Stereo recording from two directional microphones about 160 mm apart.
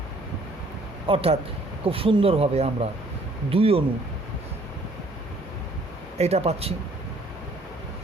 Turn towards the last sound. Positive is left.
turn(degrees=-40)  # may be behind; listen again after turning